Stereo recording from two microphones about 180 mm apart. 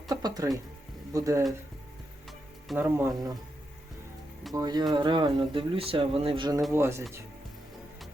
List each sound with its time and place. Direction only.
0.1 s speech: 20° right (ahead or behind)
2.7 s speech: 10° right (ahead or behind)
4.5 s speech: 20° right (ahead or behind)
6.7 s speech: 15° right (ahead or behind)